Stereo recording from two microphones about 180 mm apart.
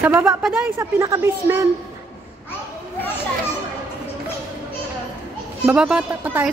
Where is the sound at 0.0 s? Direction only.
15° right (ahead or behind).